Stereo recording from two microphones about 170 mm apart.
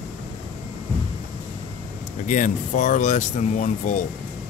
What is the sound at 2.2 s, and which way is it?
Speech, 50° left (ahead or behind).